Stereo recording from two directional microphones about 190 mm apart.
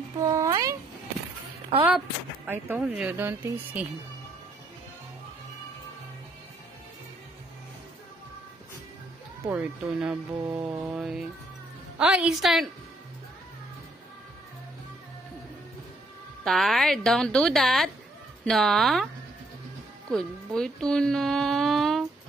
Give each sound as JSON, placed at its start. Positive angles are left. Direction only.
{"t": 0.2, "sound": "cat", "side_deg": -15}
{"t": 1.9, "sound": "speech", "side_deg": -10}
{"t": 9.6, "sound": "a woman's voice", "side_deg": -5}
{"t": 16.4, "sound": "a woman's voice", "side_deg": 0}
{"t": 20.1, "sound": "speech", "side_deg": 5}